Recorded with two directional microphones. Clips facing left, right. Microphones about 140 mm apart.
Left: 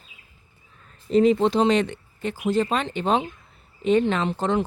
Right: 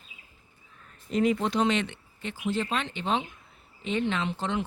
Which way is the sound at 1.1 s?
25° left (ahead or behind).